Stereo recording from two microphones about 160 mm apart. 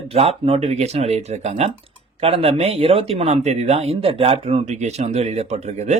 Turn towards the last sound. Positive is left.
turn(degrees=-45)  # may be behind; listen again after turning